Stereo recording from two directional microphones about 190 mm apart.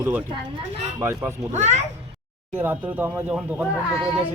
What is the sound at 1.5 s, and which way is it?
Speech, 35° right (ahead or behind).